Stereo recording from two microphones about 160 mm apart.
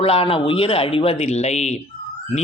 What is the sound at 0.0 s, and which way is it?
Speech, 35° left (ahead or behind).